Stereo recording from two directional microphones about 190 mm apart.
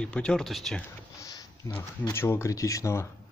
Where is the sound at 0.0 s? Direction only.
5° left (ahead or behind).